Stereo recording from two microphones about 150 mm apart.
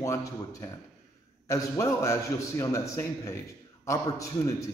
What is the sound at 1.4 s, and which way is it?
A man's voice, 20° left (ahead or behind).